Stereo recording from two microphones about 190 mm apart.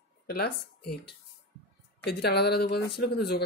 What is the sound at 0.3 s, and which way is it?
Speech, 55° left (ahead or behind).